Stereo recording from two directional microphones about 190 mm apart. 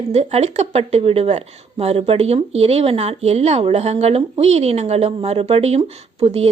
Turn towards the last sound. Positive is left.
turn(degrees=-30)  # may be behind; listen again after turning